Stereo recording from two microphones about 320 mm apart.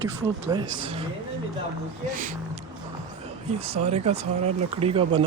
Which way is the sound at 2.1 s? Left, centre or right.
Right.